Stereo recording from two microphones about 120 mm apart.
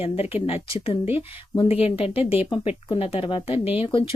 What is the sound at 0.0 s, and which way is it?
Speech, 55° left (ahead or behind).